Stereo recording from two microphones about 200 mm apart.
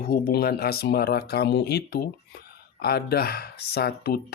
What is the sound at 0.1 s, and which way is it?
Speech, 50° left (ahead or behind).